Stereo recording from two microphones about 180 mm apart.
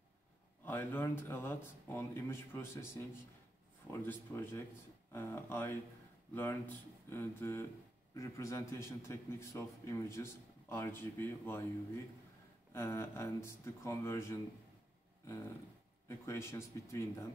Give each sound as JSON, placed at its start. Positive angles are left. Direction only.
{"t": 0.7, "sound": "a man's voice", "side_deg": 10}
{"t": 16.1, "sound": "a man's voice", "side_deg": 15}